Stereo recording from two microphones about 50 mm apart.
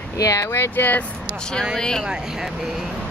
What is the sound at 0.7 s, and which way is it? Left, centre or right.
Speech, left.